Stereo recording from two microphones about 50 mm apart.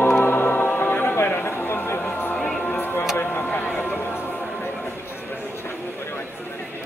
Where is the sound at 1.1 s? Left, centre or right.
Left.